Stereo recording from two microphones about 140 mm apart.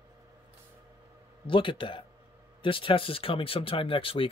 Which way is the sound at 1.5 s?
35° left (ahead or behind).